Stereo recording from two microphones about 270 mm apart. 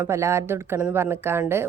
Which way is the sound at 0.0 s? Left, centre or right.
Centre.